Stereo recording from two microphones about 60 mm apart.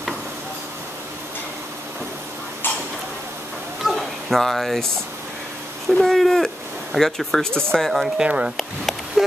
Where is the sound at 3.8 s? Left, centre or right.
Centre.